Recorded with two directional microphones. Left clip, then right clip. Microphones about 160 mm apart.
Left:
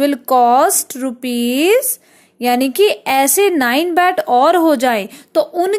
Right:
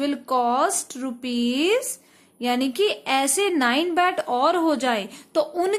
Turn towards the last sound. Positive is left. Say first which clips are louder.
# left 7 dB
turn(degrees=25)  # may be behind; listen again after turning